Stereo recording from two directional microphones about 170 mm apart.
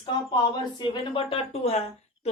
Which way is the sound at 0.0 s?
25° left (ahead or behind).